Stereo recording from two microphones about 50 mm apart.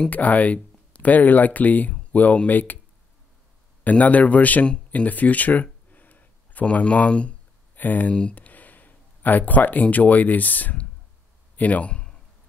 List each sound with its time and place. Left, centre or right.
0.1 s speech: left
3.8 s speech: left
7.7 s speech: left
8.1 s speech: left
8.4 s speech: left
11.5 s a sound: left